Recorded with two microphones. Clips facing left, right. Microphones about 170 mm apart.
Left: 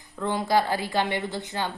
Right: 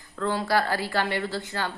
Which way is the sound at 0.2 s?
15° left (ahead or behind).